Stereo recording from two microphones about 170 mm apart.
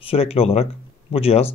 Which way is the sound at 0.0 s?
35° left (ahead or behind).